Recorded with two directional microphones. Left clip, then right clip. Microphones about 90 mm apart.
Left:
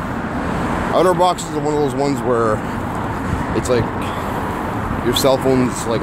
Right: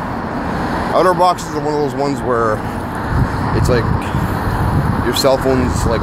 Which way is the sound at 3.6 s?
25° left (ahead or behind).